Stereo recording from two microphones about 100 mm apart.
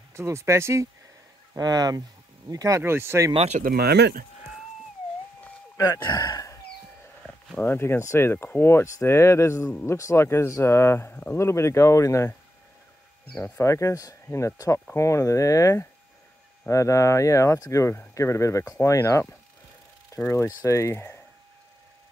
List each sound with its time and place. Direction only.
0.1 s speech: 30° right (ahead or behind)
1.6 s speech: 40° right (ahead or behind)
2.8 s speech: 25° right (ahead or behind)
6.0 s speech: 45° left (ahead or behind)
7.5 s speech: 20° left (ahead or behind)
13.4 s speech: 30° left (ahead or behind)
20.2 s speech: 30° left (ahead or behind)